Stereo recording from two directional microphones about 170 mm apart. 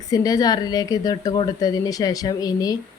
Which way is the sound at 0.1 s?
20° left (ahead or behind).